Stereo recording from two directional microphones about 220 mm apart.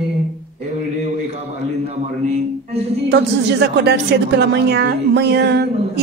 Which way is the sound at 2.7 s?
25° right (ahead or behind).